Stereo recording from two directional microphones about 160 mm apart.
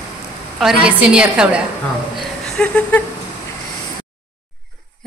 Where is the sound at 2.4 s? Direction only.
5° left (ahead or behind).